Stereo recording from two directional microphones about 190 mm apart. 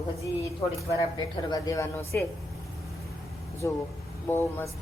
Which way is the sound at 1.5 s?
15° left (ahead or behind).